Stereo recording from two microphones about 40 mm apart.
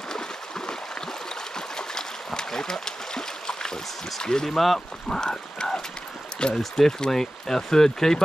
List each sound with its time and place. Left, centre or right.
0.1 s a sound: centre
1.8 s stream: centre
4.2 s speech: centre